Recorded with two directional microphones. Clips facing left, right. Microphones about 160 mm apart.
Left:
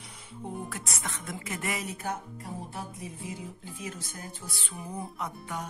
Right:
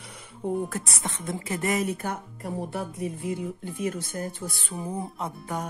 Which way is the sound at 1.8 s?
55° right (ahead or behind).